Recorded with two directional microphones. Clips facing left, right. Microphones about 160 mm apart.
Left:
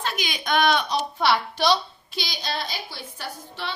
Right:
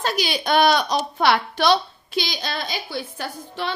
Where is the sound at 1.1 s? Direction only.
55° right (ahead or behind).